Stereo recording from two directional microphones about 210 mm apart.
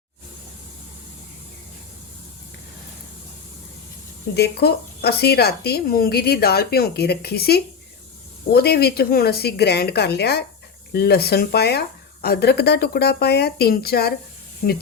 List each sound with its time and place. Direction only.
4.4 s a woman's voice: 50° left (ahead or behind)